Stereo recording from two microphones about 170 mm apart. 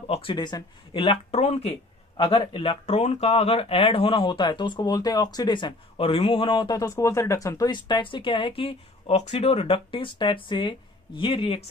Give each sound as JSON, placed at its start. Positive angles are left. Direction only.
{"t": 0.0, "sound": "speech", "side_deg": 35}